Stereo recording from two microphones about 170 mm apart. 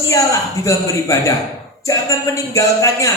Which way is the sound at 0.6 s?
20° left (ahead or behind).